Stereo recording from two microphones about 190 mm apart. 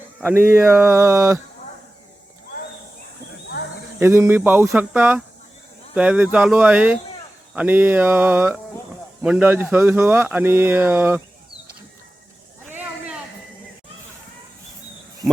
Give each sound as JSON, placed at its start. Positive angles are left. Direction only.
{"t": 0.2, "sound": "speech", "side_deg": -5}
{"t": 4.0, "sound": "speech", "side_deg": -10}
{"t": 12.7, "sound": "a sound", "side_deg": -5}